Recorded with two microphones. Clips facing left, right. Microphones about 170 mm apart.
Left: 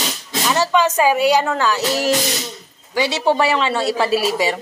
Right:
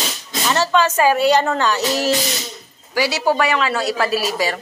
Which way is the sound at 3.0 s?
25° left (ahead or behind).